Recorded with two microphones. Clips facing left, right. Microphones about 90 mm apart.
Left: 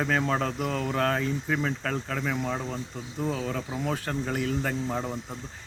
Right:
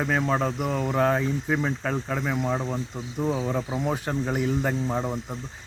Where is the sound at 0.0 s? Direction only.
5° right (ahead or behind).